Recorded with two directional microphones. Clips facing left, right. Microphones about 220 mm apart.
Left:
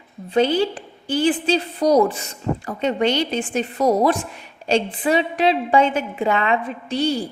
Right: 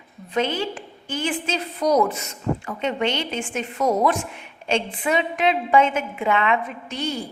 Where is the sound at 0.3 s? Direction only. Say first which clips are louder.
Left 6 dB; 35° left (ahead or behind).